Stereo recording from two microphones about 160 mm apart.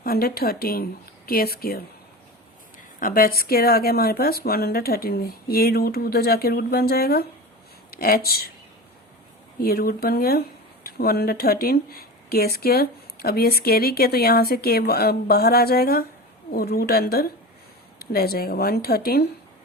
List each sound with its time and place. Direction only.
0.0 s speech: 70° left (ahead or behind)
3.0 s speech: 65° left (ahead or behind)
9.6 s speech: 70° left (ahead or behind)